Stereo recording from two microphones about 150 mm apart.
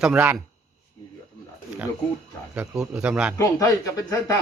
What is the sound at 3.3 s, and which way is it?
Speech, 25° left (ahead or behind).